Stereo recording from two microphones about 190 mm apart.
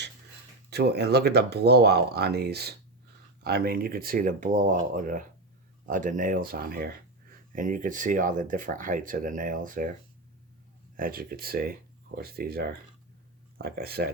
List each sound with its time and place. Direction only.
0.7 s speech: 60° right (ahead or behind)
10.9 s speech: 50° right (ahead or behind)